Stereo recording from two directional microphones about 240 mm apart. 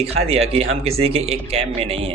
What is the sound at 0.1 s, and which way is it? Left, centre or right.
Speech, right.